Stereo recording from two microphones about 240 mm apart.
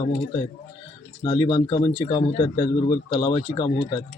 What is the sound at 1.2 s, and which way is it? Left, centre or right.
Speech, centre.